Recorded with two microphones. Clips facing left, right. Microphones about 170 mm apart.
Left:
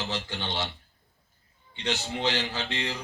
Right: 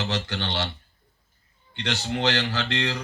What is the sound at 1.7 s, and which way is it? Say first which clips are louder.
A man's voice: right 3 dB; 75° right (ahead or behind).